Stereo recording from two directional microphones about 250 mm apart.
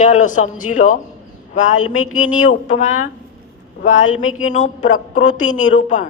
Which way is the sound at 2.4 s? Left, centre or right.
Left.